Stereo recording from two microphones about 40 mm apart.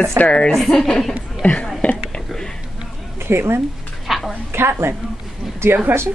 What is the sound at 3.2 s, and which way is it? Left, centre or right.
Speech, right.